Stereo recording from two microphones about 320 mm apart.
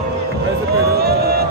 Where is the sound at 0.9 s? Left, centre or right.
Right.